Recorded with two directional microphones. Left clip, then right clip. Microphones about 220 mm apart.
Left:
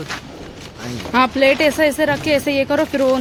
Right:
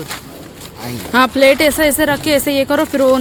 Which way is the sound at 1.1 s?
15° right (ahead or behind).